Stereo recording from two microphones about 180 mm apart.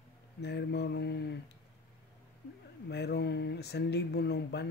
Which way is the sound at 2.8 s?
65° left (ahead or behind).